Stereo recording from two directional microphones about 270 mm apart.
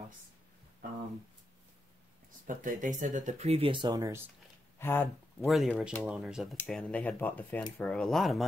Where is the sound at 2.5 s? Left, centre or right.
Right; by 4.2 s centre.